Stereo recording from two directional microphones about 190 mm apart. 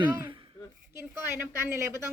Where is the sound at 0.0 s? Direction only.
20° right (ahead or behind).